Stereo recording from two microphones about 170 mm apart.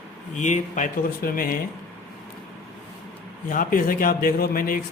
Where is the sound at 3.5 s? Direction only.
55° left (ahead or behind).